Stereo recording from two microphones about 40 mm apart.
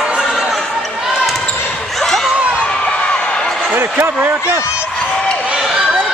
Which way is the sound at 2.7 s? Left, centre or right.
Left.